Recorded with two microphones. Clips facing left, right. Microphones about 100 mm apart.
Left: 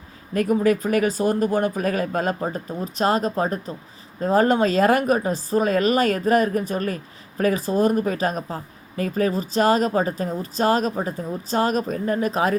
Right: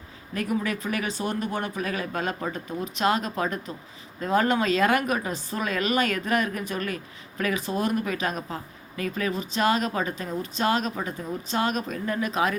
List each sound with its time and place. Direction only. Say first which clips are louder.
0.3 s speech: left 8 dB; 45° left (ahead or behind)